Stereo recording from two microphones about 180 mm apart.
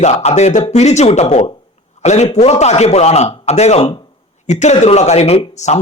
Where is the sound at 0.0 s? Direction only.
40° left (ahead or behind).